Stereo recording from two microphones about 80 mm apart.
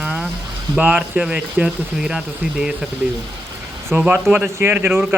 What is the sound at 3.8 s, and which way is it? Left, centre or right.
Speech, right.